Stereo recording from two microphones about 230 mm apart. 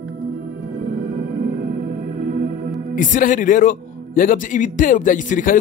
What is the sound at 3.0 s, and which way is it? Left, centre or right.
Speech, left.